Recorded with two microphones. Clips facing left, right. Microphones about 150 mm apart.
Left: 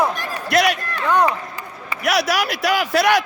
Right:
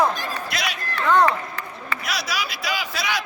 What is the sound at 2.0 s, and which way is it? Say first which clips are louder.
Speech: left 11 dB; 75° left (ahead or behind).